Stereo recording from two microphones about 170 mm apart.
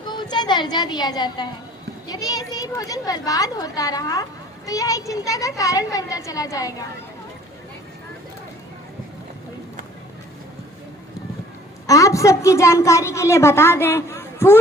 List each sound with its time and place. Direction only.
0.1 s a child's voice: 25° left (ahead or behind)
11.9 s a woman's voice: 20° left (ahead or behind)